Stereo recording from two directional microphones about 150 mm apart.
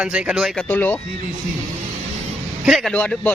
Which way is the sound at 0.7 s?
10° left (ahead or behind).